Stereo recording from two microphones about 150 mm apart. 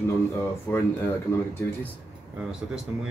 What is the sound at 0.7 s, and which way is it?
Speech, 15° left (ahead or behind).